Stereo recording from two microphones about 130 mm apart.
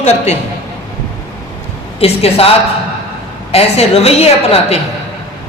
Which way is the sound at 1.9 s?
50° left (ahead or behind).